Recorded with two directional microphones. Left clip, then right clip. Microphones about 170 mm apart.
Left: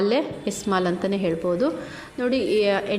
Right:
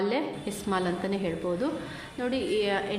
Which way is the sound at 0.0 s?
30° left (ahead or behind).